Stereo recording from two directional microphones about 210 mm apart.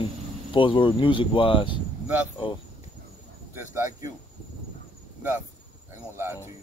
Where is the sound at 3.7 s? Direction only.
10° right (ahead or behind).